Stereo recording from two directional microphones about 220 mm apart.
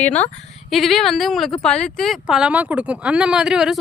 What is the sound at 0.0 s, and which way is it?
Speech, 5° left (ahead or behind).